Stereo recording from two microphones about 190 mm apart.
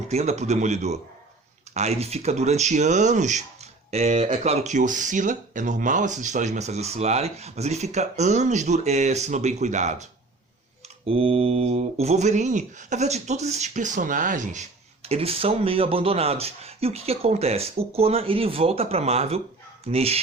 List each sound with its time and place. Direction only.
0.1 s speech: 35° right (ahead or behind)